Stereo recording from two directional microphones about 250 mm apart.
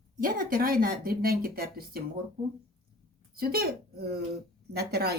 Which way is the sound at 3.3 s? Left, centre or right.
Right.